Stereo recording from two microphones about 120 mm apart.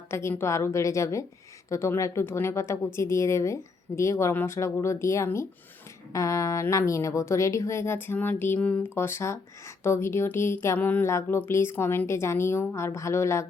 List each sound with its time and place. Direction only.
0.1 s speech: 20° left (ahead or behind)
9.0 s speech: 20° left (ahead or behind)